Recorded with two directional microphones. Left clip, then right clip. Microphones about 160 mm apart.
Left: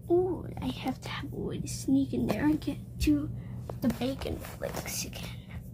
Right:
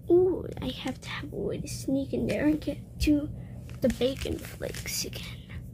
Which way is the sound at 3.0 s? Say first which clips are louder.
Right 2 dB; 25° right (ahead or behind).